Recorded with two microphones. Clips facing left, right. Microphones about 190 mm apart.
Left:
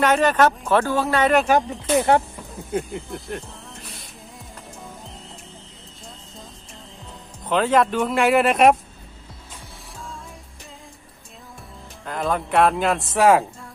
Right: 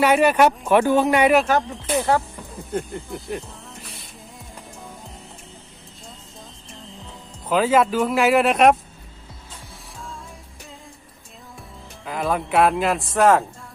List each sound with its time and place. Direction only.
0.0 s speech: 10° right (ahead or behind)
1.5 s speech: 15° left (ahead or behind)
2.3 s music: centre (ahead or behind)
7.4 s speech: 5° right (ahead or behind)
12.0 s speech: 5° right (ahead or behind)